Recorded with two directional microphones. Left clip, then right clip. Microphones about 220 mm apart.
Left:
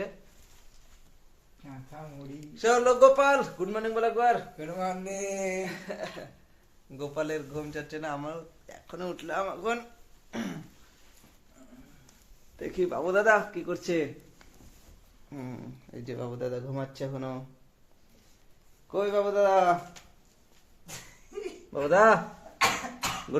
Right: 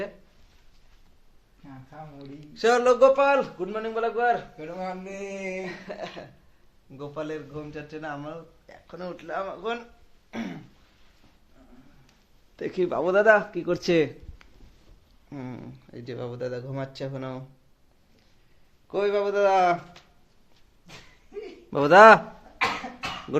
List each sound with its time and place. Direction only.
2.6 s speech: 45° right (ahead or behind)
3.0 s a man's voice: 20° right (ahead or behind)
4.5 s speech: 5° right (ahead or behind)
5.6 s a man's voice: 25° right (ahead or behind)
6.9 s a man's voice: centre (ahead or behind)
10.3 s speech: 10° right (ahead or behind)
12.5 s speech: 40° right (ahead or behind)
13.7 s speech: 50° right (ahead or behind)
15.3 s a man's voice: 20° right (ahead or behind)
15.9 s speech: 10° right (ahead or behind)
18.9 s speech: 15° right (ahead or behind)
21.7 s speech: 40° right (ahead or behind)
23.3 s dog: 20° right (ahead or behind)